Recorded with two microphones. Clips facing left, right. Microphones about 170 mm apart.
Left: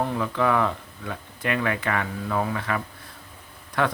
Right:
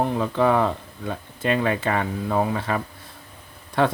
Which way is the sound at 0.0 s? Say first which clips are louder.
Right 3 dB; 30° right (ahead or behind).